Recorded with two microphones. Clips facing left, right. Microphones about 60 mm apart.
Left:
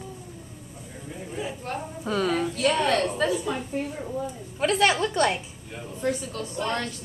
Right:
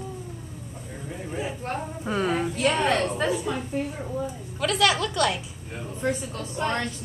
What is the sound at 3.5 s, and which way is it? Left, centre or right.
Speech, centre.